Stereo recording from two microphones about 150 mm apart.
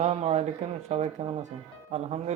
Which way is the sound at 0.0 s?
45° right (ahead or behind).